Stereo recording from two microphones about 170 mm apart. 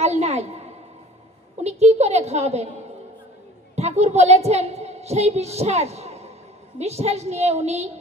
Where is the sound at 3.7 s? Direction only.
40° right (ahead or behind).